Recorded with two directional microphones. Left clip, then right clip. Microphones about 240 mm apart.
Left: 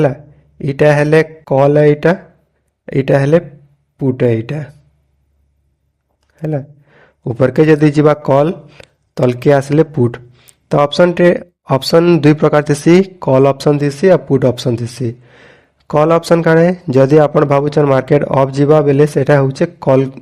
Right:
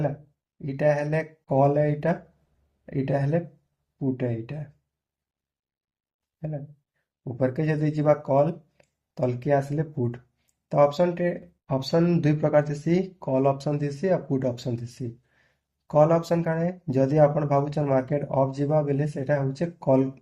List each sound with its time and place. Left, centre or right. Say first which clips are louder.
0.6 s speech: left 13 dB; left
7.3 s speech: left 17 dB; left